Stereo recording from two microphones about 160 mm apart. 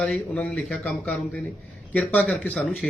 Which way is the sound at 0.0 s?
5° left (ahead or behind).